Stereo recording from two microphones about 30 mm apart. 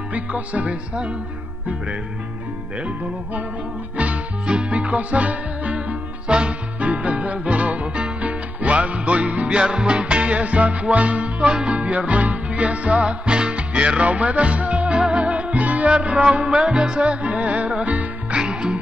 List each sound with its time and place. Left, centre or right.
0.1 s music: right
3.9 s music: right
4.5 s music: right
4.7 s music: right
6.2 s music: right
6.8 s music: right
9.5 s music: right
16.6 s music: right
17.0 s music: right
18.3 s music: right